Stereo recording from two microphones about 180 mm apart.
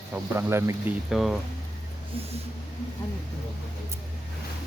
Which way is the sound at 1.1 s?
Centre (ahead or behind).